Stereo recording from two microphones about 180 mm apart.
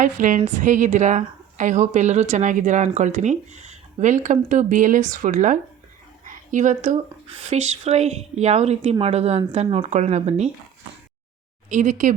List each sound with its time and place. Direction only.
0.0 s a woman's voice: 45° right (ahead or behind)
6.2 s a sound: 45° right (ahead or behind)
7.5 s speech: 35° right (ahead or behind)
11.7 s a woman's voice: 45° right (ahead or behind)